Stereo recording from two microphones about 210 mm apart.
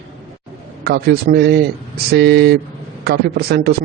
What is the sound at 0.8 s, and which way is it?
A man's voice, 45° right (ahead or behind).